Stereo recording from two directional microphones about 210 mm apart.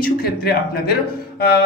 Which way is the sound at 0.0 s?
45° left (ahead or behind).